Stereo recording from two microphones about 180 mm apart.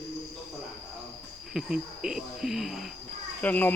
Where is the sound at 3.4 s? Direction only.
10° left (ahead or behind).